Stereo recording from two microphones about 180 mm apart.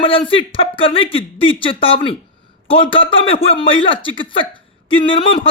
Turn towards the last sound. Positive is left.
turn(degrees=30)  # may be behind; listen again after turning